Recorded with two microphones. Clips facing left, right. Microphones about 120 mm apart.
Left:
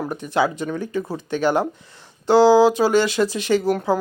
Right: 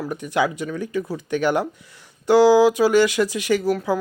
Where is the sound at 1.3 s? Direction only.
15° left (ahead or behind).